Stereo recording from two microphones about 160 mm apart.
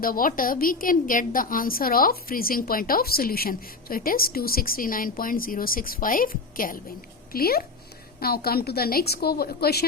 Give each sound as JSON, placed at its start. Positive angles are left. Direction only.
{"t": 0.0, "sound": "a woman's voice", "side_deg": 60}
{"t": 7.3, "sound": "a woman's voice", "side_deg": 70}